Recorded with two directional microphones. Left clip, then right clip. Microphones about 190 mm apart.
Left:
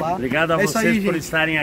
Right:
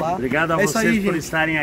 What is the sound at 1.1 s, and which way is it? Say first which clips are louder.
Speech: left 1 dB; 30° left (ahead or behind).